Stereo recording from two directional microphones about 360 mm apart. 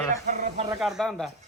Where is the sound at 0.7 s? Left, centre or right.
Centre.